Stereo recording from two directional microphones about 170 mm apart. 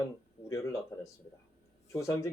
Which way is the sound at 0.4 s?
20° left (ahead or behind).